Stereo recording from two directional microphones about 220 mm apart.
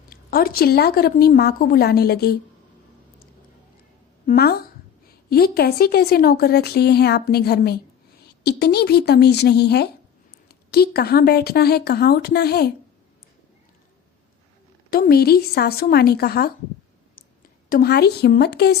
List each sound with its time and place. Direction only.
0.1 s a woman's voice: 40° left (ahead or behind)
4.3 s a woman's voice: 45° left (ahead or behind)
14.8 s a woman's voice: 45° left (ahead or behind)